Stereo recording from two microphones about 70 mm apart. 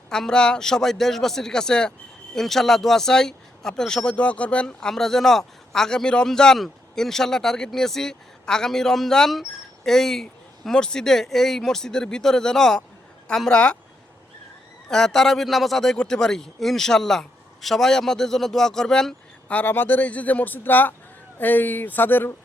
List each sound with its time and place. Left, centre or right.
0.1 s speech: centre
14.8 s speech: centre
19.5 s a man's voice: left